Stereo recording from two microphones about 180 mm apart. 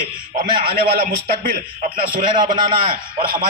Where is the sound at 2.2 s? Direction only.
25° right (ahead or behind).